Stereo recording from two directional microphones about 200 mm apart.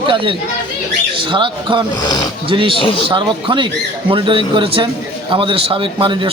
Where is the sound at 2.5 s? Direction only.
25° right (ahead or behind).